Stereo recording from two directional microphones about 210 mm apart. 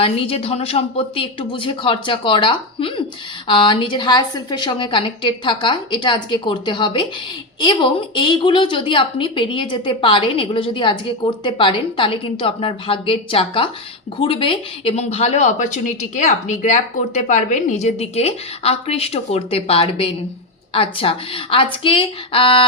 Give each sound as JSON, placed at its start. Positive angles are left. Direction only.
{"t": 0.0, "sound": "a woman's voice", "side_deg": 25}